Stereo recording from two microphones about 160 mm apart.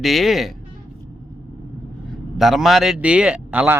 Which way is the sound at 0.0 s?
Centre (ahead or behind).